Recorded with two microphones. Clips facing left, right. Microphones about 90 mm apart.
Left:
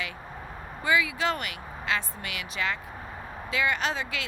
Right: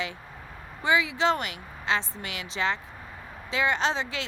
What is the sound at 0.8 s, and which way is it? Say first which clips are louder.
Speech: right 1 dB; 25° right (ahead or behind).